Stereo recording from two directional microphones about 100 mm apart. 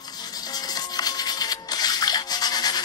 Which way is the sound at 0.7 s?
40° left (ahead or behind).